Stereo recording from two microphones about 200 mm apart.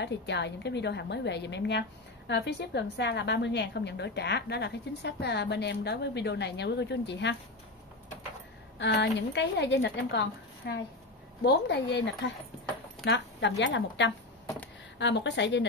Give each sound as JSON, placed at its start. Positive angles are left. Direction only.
{"t": 0.0, "sound": "a woman's voice", "side_deg": 60}
{"t": 8.7, "sound": "a woman's voice", "side_deg": 60}